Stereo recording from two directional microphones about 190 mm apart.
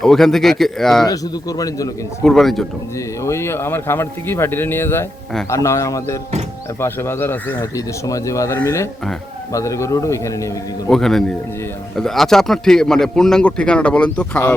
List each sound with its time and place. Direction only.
0.0 s speech: centre (ahead or behind)
1.0 s speech: 20° left (ahead or behind)
2.2 s speech: centre (ahead or behind)
3.2 s a man's voice: 15° left (ahead or behind)
10.8 s speech: centre (ahead or behind)